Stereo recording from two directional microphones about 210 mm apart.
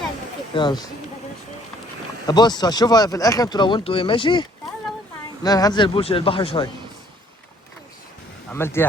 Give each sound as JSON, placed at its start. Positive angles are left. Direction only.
{"t": 0.5, "sound": "speech", "side_deg": 20}
{"t": 2.2, "sound": "speech", "side_deg": 20}
{"t": 8.4, "sound": "speech", "side_deg": 10}